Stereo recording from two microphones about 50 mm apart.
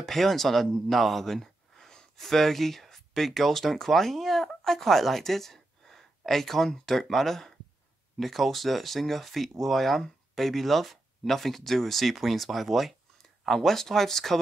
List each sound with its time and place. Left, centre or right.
0.0 s speech: centre